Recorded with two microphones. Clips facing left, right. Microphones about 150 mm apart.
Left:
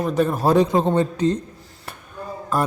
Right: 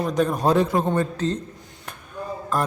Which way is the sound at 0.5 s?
20° left (ahead or behind).